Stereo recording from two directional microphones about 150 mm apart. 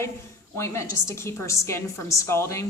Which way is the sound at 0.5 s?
15° left (ahead or behind).